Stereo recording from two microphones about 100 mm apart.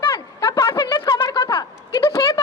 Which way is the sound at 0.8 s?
50° left (ahead or behind).